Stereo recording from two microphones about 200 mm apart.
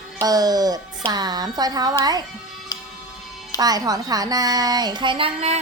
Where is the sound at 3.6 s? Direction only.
20° right (ahead or behind).